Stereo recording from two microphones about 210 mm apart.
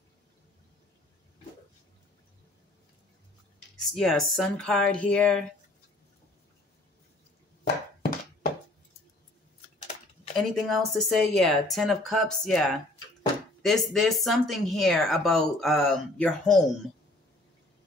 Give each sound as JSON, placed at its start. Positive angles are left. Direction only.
{"t": 3.9, "sound": "speech", "side_deg": 0}
{"t": 7.6, "sound": "thunk", "side_deg": 45}
{"t": 10.3, "sound": "speech", "side_deg": 0}